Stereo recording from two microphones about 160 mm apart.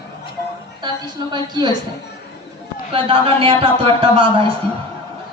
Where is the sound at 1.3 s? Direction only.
30° right (ahead or behind).